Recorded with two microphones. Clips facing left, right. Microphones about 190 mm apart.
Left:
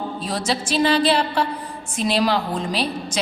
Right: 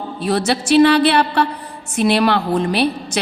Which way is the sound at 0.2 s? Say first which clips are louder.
Right 9 dB; 65° right (ahead or behind).